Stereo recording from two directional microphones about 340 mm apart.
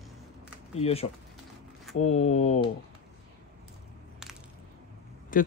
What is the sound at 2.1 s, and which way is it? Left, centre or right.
Speech, centre.